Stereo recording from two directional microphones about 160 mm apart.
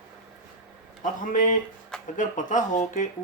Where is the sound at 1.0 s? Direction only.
55° left (ahead or behind).